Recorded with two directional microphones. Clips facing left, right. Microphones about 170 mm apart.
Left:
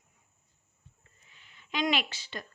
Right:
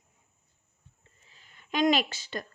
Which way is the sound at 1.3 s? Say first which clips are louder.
Right 4 dB; 40° right (ahead or behind).